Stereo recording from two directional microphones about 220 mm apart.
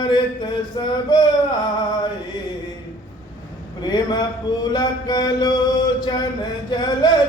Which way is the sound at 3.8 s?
20° left (ahead or behind).